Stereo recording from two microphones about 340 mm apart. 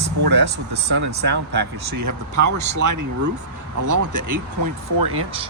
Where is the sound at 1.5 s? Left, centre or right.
Right.